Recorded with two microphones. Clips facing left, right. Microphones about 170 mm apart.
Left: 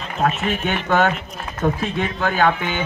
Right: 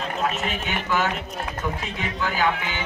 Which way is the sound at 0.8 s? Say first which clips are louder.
Left 6 dB; 60° left (ahead or behind).